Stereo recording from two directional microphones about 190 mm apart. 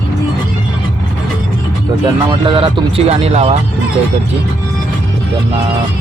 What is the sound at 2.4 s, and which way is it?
Speech, 25° right (ahead or behind).